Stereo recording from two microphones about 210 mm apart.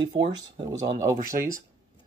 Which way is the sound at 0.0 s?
25° right (ahead or behind).